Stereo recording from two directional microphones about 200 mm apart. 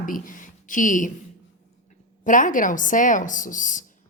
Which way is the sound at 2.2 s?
40° left (ahead or behind).